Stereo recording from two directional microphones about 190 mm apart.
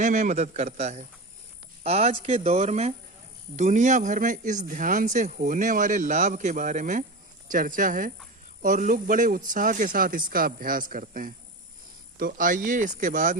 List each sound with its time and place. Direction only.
0.0 s speech: 40° right (ahead or behind)